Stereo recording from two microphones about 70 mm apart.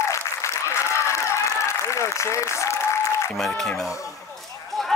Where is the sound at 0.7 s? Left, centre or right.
Left.